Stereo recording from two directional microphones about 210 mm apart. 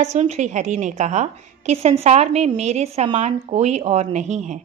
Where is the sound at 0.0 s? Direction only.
30° right (ahead or behind).